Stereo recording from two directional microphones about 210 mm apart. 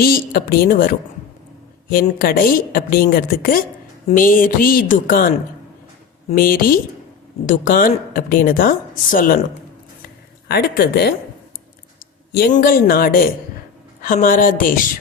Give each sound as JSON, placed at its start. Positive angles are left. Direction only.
{"t": 0.0, "sound": "a woman's voice", "side_deg": 45}
{"t": 6.3, "sound": "a woman's voice", "side_deg": 40}
{"t": 10.5, "sound": "a woman's voice", "side_deg": 50}
{"t": 12.3, "sound": "a woman's voice", "side_deg": 40}